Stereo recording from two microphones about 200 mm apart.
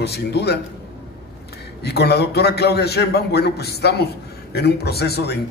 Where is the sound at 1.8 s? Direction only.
55° left (ahead or behind).